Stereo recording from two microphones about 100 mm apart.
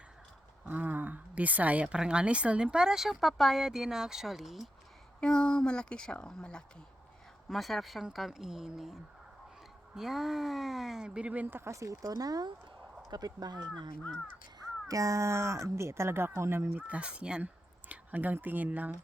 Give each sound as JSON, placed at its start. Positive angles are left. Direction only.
{"t": 0.6, "sound": "speech", "side_deg": -15}
{"t": 5.2, "sound": "speech", "side_deg": 10}